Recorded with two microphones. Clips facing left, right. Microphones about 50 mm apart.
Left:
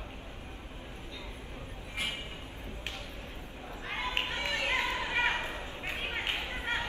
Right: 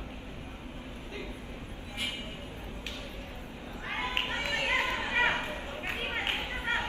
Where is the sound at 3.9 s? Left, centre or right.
Right.